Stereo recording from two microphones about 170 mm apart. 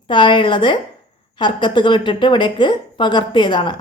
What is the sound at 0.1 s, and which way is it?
A woman's voice, 30° left (ahead or behind).